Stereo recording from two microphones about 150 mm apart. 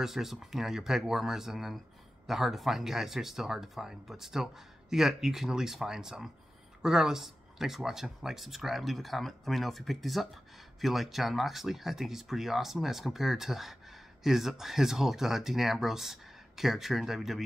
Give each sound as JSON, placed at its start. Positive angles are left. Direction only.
{"t": 0.0, "sound": "speech", "side_deg": 0}